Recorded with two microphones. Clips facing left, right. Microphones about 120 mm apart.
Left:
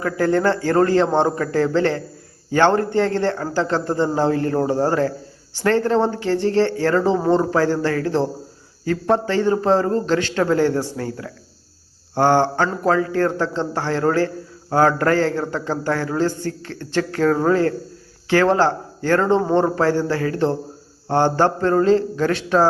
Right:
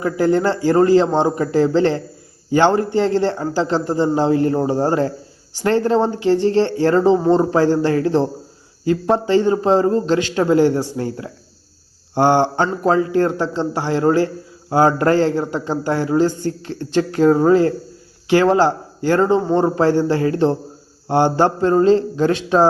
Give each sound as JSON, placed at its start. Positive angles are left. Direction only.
{"t": 0.0, "sound": "a man's voice", "side_deg": -20}